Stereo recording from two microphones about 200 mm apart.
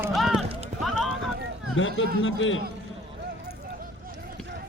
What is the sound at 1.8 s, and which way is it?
Speech, 70° left (ahead or behind).